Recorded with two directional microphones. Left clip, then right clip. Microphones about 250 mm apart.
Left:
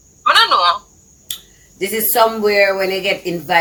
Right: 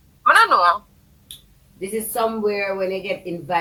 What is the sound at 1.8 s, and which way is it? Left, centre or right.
Speech, left.